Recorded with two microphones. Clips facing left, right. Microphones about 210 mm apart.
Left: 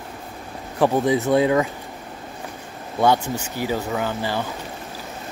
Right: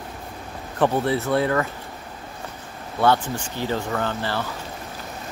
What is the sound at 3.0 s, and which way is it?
Speech, 10° left (ahead or behind).